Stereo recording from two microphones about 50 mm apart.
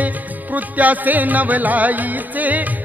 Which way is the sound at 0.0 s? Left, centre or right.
Right.